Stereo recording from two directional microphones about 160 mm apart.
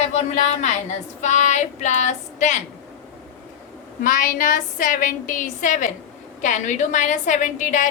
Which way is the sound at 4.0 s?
55° left (ahead or behind).